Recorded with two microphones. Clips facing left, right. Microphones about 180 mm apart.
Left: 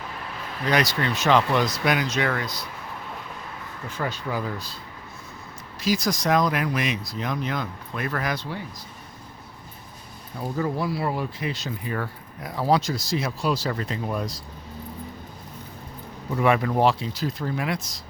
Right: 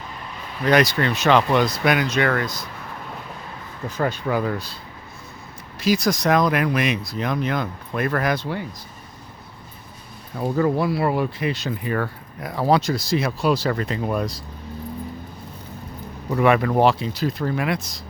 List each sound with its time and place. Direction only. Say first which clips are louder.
0.7 s speech: right 5 dB; 55° right (ahead or behind)
3.8 s speech: right 6 dB; 45° right (ahead or behind); by 4.8 s 65° right (ahead or behind)
5.8 s speech: right 4 dB; 65° right (ahead or behind)
10.3 s speech: right 6 dB; 65° right (ahead or behind)
16.3 s speech: right 4 dB; 65° right (ahead or behind)